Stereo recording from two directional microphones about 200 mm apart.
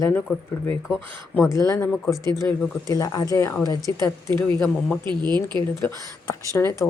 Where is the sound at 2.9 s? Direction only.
20° left (ahead or behind).